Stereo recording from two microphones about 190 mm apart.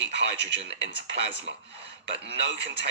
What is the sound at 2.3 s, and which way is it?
Speech, 65° right (ahead or behind).